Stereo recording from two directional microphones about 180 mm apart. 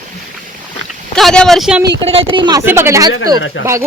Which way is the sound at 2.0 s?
30° right (ahead or behind).